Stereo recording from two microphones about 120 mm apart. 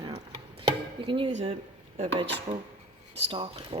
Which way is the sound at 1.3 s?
65° right (ahead or behind).